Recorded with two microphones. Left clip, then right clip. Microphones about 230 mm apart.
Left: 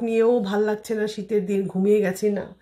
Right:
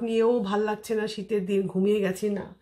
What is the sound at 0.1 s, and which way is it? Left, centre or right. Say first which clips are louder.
Speech: left 4 dB; centre.